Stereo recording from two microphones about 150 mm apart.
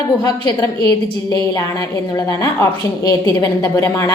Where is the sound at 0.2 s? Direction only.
25° left (ahead or behind).